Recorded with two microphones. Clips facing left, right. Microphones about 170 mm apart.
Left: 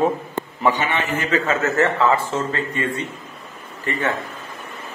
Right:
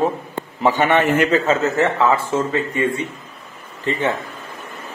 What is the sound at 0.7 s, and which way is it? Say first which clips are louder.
Speech: right 8 dB; 55° right (ahead or behind).